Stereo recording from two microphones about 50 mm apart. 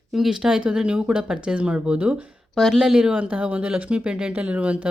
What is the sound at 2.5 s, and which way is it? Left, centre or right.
Speech, centre.